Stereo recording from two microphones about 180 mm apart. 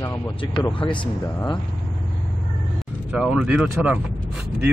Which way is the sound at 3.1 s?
5° right (ahead or behind).